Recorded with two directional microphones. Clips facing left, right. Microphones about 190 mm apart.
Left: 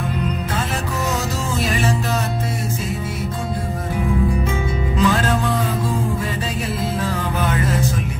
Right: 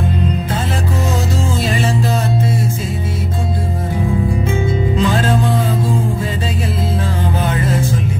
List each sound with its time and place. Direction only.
1.6 s music: 30° right (ahead or behind)
4.5 s music: 30° right (ahead or behind)
7.3 s music: 30° right (ahead or behind)